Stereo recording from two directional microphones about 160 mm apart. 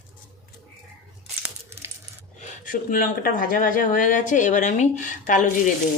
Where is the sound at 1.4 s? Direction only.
15° right (ahead or behind).